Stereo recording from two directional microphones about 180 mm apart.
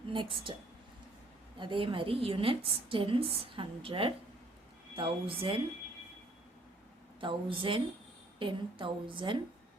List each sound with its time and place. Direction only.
0.1 s a woman's voice: 30° right (ahead or behind)
1.5 s a woman's voice: 25° right (ahead or behind)
7.2 s a woman's voice: 30° right (ahead or behind)